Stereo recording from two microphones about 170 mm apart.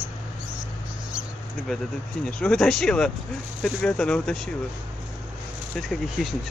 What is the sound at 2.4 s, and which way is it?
Speech, 5° left (ahead or behind).